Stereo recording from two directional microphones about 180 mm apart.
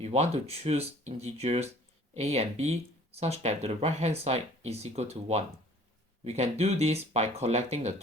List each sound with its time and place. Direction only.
0.0 s speech: 35° right (ahead or behind)